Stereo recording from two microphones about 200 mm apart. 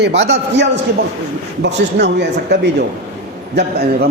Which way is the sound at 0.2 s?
60° right (ahead or behind).